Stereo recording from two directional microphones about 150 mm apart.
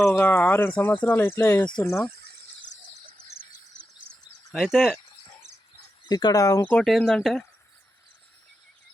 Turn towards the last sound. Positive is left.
turn(degrees=5)  # may be behind; listen again after turning